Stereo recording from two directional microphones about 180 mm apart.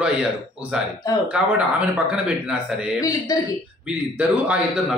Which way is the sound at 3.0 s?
20° left (ahead or behind).